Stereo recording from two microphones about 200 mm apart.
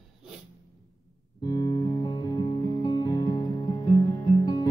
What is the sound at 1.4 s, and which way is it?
Music, 20° left (ahead or behind).